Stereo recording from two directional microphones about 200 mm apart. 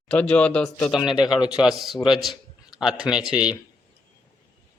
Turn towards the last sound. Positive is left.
turn(degrees=-5)  # may be behind; listen again after turning